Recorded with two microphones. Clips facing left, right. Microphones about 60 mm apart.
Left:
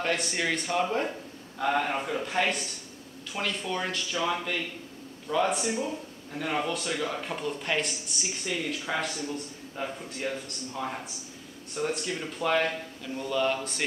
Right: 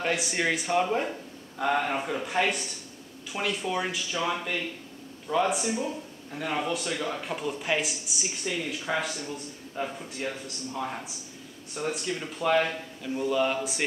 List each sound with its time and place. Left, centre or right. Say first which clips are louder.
0.0 s speech: right 1 dB; centre